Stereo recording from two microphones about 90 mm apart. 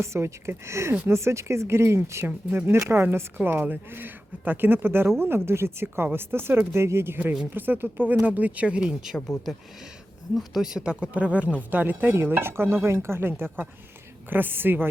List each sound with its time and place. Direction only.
0.0 s speech: 30° right (ahead or behind); by 9.1 s 10° right (ahead or behind)
10.3 s speech: 5° right (ahead or behind); by 14.8 s 25° right (ahead or behind)